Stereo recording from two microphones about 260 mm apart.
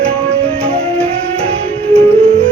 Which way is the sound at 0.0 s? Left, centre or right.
Right.